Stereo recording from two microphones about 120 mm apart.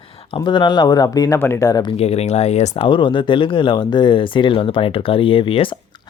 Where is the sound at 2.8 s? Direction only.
40° left (ahead or behind).